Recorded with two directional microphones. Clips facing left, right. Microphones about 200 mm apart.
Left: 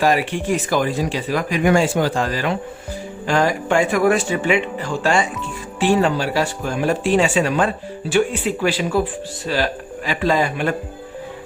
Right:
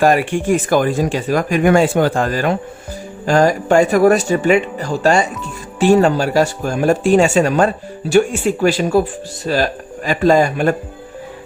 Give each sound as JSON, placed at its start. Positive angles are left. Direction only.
{"t": 0.0, "sound": "speech", "side_deg": -50}